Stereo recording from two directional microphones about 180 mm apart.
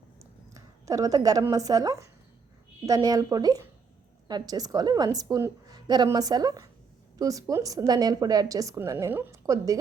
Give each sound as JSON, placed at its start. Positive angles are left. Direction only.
{"t": 0.2, "sound": "a woman's voice", "side_deg": -15}